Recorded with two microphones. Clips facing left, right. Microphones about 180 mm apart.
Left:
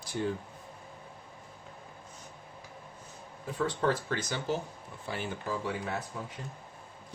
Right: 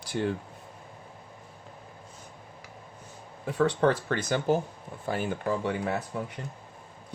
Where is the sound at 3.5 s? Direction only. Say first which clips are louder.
Right 6 dB; 70° right (ahead or behind).